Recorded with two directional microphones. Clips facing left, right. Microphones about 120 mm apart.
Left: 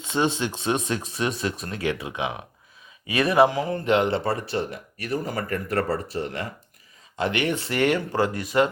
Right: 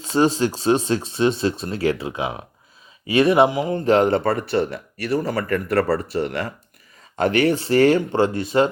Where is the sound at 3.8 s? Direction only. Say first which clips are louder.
Right 6 dB; 40° right (ahead or behind); by 6.5 s 70° right (ahead or behind).